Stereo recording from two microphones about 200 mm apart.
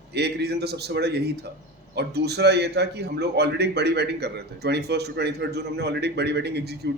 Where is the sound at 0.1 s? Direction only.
55° right (ahead or behind).